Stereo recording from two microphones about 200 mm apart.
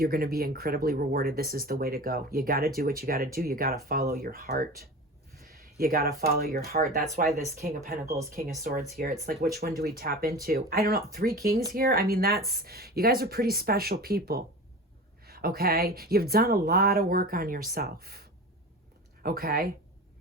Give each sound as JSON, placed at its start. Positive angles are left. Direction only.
{"t": 0.0, "sound": "speech", "side_deg": -50}